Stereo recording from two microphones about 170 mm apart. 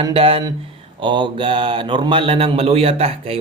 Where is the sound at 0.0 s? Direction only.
30° right (ahead or behind).